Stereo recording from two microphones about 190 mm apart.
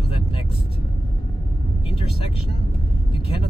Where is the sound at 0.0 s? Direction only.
30° left (ahead or behind).